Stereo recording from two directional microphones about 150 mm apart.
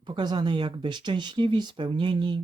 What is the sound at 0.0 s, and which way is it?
Speech, 30° right (ahead or behind).